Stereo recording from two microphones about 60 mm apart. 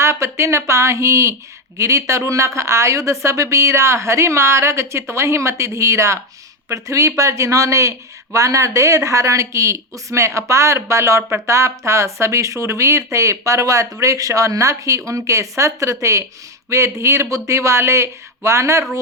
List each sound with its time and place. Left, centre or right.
0.0 s a woman's voice: right